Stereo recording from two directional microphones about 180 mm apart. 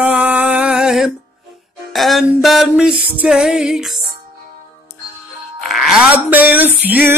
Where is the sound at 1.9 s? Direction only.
Centre (ahead or behind).